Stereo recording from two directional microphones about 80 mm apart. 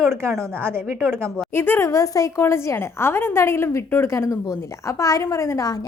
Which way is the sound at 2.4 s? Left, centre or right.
Left.